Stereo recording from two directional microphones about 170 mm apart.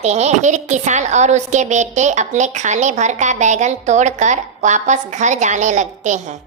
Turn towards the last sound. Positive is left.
turn(degrees=-45)  # may be behind; listen again after turning